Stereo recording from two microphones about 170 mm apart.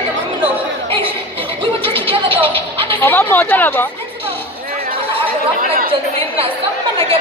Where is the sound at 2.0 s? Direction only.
30° right (ahead or behind).